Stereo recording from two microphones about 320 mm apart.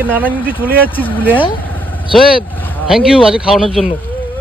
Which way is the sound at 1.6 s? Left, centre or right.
Centre.